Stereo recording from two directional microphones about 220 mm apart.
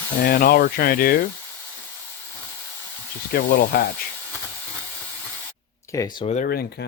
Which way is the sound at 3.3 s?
45° left (ahead or behind).